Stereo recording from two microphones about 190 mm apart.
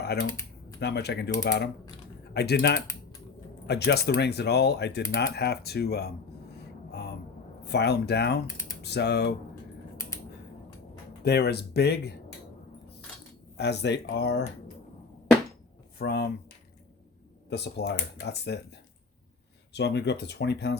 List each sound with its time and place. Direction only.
0.0 s speech: 60° left (ahead or behind)
0.3 s typing: 15° left (ahead or behind)
0.8 s speech: 60° left (ahead or behind)
7.6 s speech: 60° left (ahead or behind)
8.4 s speech: 15° left (ahead or behind)
8.8 s speech: 60° left (ahead or behind)
11.2 s speech: 60° left (ahead or behind)
13.6 s speech: 60° left (ahead or behind)
16.0 s speech: 60° left (ahead or behind)
17.5 s speech: 60° left (ahead or behind)
19.7 s speech: 65° left (ahead or behind)